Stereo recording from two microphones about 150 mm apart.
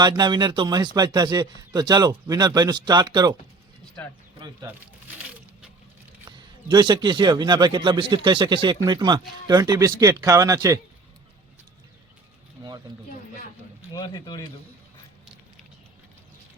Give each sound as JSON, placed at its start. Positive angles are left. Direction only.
{"t": 0.0, "sound": "speech", "side_deg": -30}
{"t": 4.4, "sound": "speech", "side_deg": -30}
{"t": 6.7, "sound": "speech", "side_deg": -30}
{"t": 13.9, "sound": "speech", "side_deg": 30}